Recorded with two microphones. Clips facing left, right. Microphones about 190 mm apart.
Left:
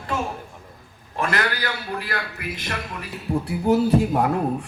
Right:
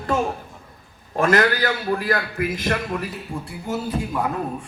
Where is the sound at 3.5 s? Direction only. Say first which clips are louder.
Left 9 dB; 65° left (ahead or behind).